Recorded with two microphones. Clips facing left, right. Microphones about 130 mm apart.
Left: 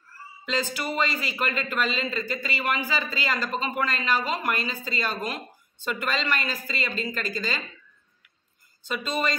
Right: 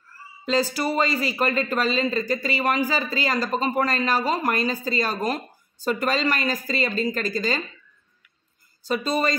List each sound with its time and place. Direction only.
0.5 s speech: 35° right (ahead or behind)
8.8 s speech: 35° right (ahead or behind)